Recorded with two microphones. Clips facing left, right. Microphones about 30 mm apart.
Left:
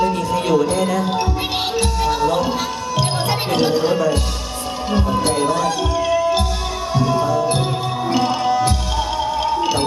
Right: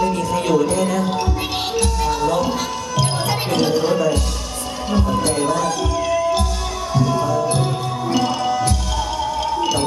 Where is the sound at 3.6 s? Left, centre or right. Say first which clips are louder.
Even; left.